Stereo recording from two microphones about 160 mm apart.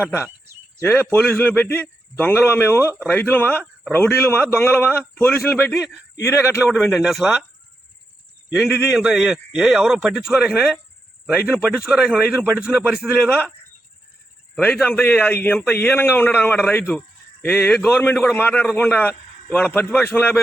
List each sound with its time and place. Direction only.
0.8 s a man's voice: 10° left (ahead or behind)
6.7 s a man's voice: centre (ahead or behind)
8.5 s a man's voice: 5° right (ahead or behind)
14.5 s a man's voice: 5° left (ahead or behind)